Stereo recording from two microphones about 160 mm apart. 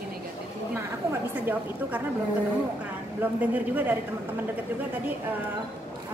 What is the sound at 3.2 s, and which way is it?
Speech, 10° right (ahead or behind).